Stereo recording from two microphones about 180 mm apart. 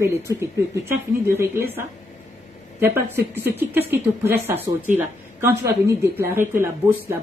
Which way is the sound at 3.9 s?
10° right (ahead or behind).